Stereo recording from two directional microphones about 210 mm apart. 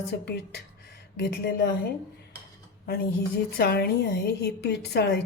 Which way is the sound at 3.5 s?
50° left (ahead or behind).